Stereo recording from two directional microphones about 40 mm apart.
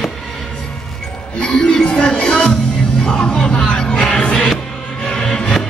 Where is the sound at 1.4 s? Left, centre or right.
Left.